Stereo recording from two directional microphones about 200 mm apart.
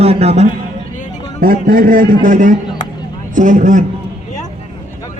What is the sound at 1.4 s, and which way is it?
A man's voice, 45° right (ahead or behind).